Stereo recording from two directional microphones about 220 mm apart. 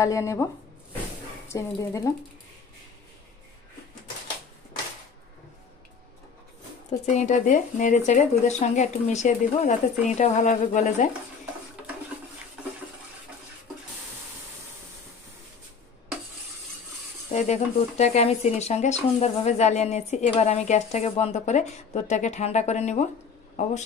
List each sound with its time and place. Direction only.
0.0 s speech: 15° left (ahead or behind)
1.5 s speech: 15° left (ahead or behind)
7.2 s speech: 35° left (ahead or behind)
17.3 s speech: 30° left (ahead or behind)